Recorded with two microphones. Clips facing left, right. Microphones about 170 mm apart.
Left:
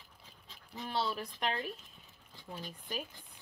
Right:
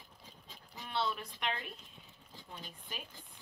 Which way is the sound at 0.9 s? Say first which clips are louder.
Left 1 dB; 35° left (ahead or behind).